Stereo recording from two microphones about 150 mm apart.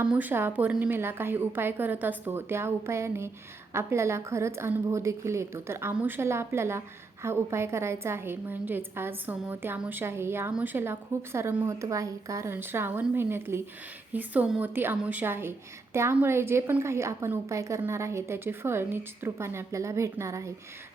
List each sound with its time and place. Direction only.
0.0 s a woman's voice: 10° right (ahead or behind)